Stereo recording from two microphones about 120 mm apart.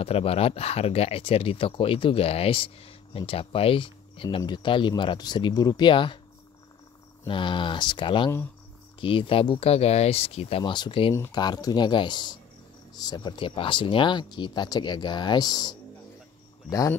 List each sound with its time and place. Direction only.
0.0 s speech: 55° left (ahead or behind)
7.2 s speech: 45° left (ahead or behind)